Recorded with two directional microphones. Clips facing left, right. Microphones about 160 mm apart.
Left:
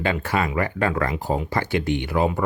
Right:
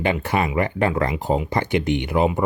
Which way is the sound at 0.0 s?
20° right (ahead or behind).